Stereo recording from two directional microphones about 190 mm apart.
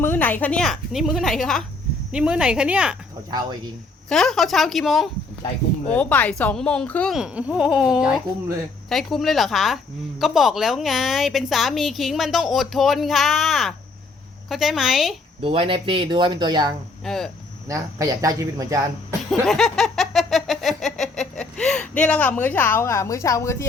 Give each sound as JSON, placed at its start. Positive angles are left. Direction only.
{"t": 0.0, "sound": "a woman's voice", "side_deg": 10}
{"t": 4.1, "sound": "a woman's voice", "side_deg": 0}
{"t": 15.4, "sound": "speech", "side_deg": -30}
{"t": 17.0, "sound": "a woman's voice", "side_deg": 0}
{"t": 17.7, "sound": "speech", "side_deg": -15}
{"t": 19.3, "sound": "a sound", "side_deg": 0}